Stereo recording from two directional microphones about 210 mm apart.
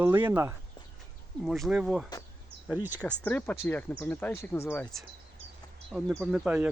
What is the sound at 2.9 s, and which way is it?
Speech, 5° left (ahead or behind).